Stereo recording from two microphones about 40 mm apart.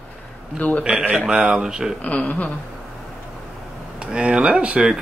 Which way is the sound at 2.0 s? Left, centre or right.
Left.